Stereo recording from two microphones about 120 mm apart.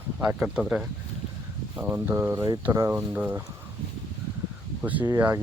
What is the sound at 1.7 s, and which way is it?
Speech, 15° right (ahead or behind).